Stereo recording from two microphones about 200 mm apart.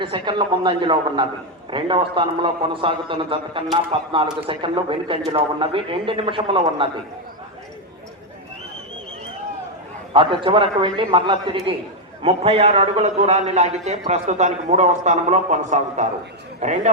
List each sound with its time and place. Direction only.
0.0 s a man's voice: 25° right (ahead or behind)
10.1 s a man's voice: 25° right (ahead or behind)